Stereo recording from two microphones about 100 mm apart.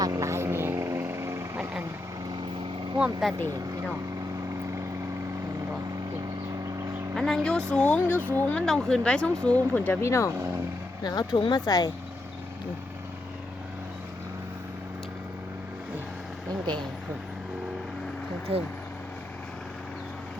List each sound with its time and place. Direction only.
0.0 s vehicle: 30° right (ahead or behind)
3.0 s speech: 5° right (ahead or behind)
7.2 s speech: 5° left (ahead or behind)
8.6 s speech: 5° left (ahead or behind); by 10.3 s 30° left (ahead or behind)
11.0 s speech: 45° left (ahead or behind)
11.3 s speech: 55° left (ahead or behind)
11.6 s speech: 40° left (ahead or behind)
18.5 s speech: 65° right (ahead or behind)